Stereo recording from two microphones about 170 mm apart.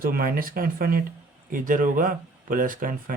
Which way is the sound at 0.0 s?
60° right (ahead or behind).